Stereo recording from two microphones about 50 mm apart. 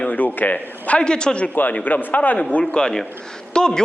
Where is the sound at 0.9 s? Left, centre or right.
Centre.